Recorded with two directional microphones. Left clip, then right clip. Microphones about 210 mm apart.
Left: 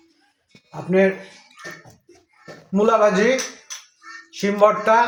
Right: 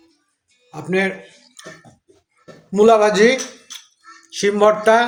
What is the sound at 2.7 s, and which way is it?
A man's voice, 55° right (ahead or behind).